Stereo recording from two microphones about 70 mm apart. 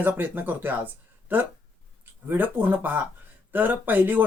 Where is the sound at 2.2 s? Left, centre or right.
Right.